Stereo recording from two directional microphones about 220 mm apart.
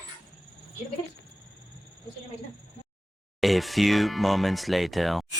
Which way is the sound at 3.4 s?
Centre (ahead or behind).